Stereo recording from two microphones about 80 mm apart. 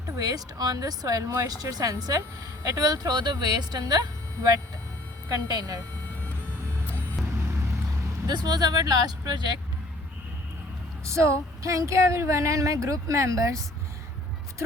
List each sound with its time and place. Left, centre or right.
0.2 s speech: right
5.3 s speech: right
7.2 s vehicle: centre
8.3 s speech: right
11.0 s speech: right